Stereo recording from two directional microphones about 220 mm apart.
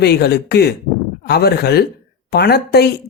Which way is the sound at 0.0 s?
45° left (ahead or behind).